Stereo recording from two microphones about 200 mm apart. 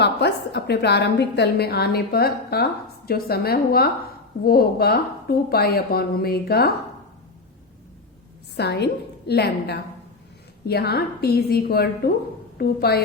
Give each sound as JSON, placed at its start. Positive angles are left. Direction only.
{"t": 0.0, "sound": "a woman's voice", "side_deg": 55}
{"t": 8.5, "sound": "a woman's voice", "side_deg": 55}